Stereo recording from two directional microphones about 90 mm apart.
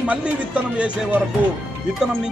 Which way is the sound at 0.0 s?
15° right (ahead or behind).